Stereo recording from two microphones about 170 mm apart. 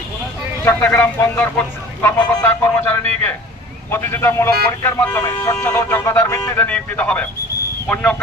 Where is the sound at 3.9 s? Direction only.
15° left (ahead or behind).